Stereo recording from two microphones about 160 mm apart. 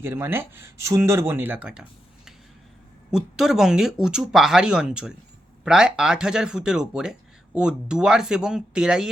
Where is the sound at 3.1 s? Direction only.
5° right (ahead or behind).